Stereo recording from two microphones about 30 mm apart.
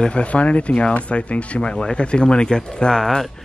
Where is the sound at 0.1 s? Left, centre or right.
Left.